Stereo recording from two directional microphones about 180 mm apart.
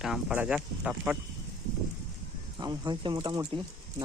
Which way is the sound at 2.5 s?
20° right (ahead or behind).